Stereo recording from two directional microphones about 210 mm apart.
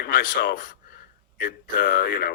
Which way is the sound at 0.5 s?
40° left (ahead or behind).